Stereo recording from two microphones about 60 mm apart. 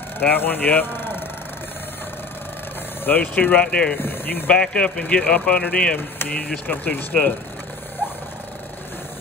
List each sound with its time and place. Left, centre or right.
0.2 s speech: left
3.1 s speech: left
3.6 s speech: centre
3.9 s speech: left
4.6 s speech: centre
6.7 s speech: left